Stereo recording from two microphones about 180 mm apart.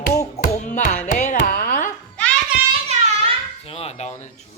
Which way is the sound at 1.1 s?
50° left (ahead or behind).